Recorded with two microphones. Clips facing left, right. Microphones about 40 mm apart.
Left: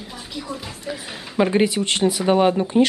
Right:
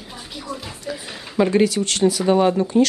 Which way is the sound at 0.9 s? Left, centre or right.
Centre.